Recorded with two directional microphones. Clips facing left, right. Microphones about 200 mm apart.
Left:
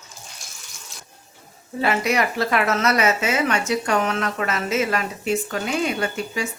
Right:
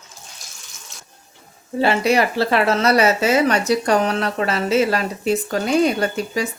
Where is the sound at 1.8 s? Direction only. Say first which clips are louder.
Right 4 dB; 30° right (ahead or behind).